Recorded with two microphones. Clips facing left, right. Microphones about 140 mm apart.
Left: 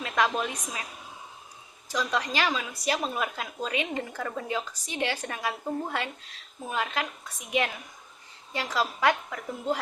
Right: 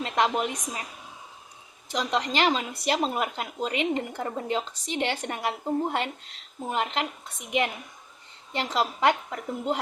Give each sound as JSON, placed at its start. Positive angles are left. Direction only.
{"t": 0.2, "sound": "a woman's voice", "side_deg": -20}
{"t": 1.9, "sound": "a woman's voice", "side_deg": -20}
{"t": 8.5, "sound": "a woman's voice", "side_deg": -25}